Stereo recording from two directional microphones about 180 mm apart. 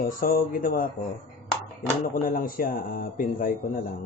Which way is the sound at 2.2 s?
50° left (ahead or behind).